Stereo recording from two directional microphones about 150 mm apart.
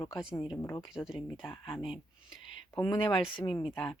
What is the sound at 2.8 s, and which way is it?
Speech, 20° left (ahead or behind).